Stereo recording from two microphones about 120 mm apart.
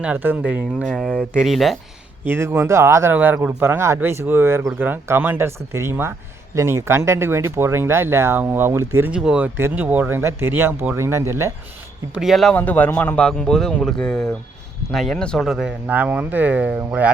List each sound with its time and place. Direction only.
0.0 s speech: 15° right (ahead or behind)
0.9 s speech: 5° left (ahead or behind)
2.2 s speech: 20° right (ahead or behind)
12.1 s speech: centre (ahead or behind)
12.5 s a man's voice: 15° left (ahead or behind); by 17.1 s 10° right (ahead or behind)